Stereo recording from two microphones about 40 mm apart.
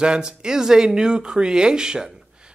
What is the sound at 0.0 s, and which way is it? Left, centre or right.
Speech, right.